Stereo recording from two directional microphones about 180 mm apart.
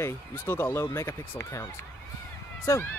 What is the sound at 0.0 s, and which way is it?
Speech, 15° left (ahead or behind).